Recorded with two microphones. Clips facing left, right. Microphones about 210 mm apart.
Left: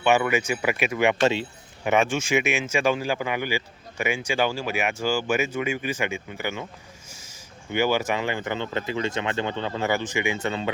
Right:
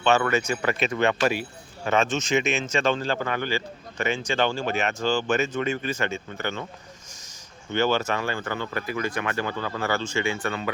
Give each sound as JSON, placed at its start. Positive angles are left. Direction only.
{"t": 0.0, "sound": "speech", "side_deg": 15}
{"t": 1.2, "sound": "speech", "side_deg": 25}
{"t": 7.7, "sound": "speech", "side_deg": 15}